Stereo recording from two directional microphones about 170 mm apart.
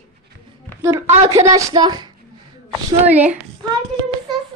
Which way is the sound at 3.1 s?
10° right (ahead or behind).